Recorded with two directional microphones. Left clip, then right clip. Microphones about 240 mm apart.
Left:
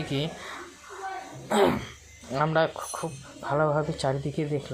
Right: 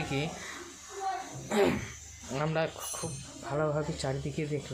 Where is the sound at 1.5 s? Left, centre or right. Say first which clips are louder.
Left 5 dB; centre.